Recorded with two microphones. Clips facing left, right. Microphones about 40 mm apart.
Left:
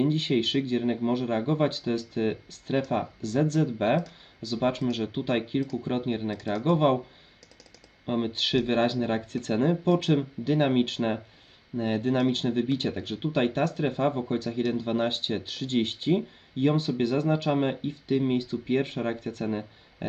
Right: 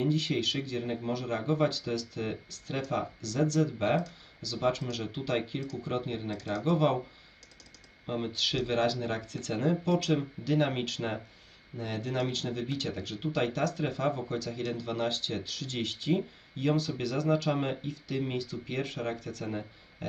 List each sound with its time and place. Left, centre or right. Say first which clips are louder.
0.0 s speech: left 4 dB; left
8.0 s speech: left 4 dB; left